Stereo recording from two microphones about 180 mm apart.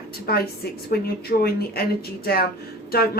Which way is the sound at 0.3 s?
60° left (ahead or behind).